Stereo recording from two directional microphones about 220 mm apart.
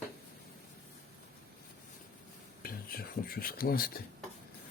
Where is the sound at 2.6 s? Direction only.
40° left (ahead or behind).